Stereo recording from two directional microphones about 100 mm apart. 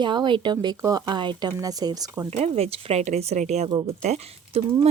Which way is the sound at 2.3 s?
90° right.